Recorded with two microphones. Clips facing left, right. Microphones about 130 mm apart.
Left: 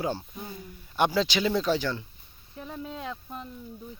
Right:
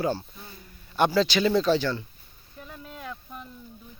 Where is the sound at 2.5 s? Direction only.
25° left (ahead or behind).